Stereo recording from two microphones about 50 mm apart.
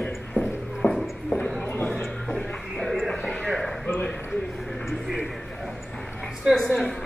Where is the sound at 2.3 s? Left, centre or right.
Centre.